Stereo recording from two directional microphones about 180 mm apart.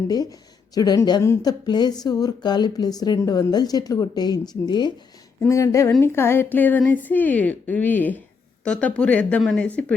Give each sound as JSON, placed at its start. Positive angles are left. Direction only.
{"t": 0.1, "sound": "a woman's voice", "side_deg": 20}